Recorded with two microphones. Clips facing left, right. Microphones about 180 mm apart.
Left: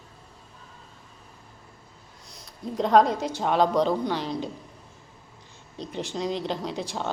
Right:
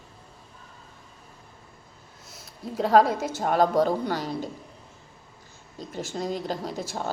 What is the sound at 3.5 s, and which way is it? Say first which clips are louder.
Speech: right 1 dB; 50° right (ahead or behind).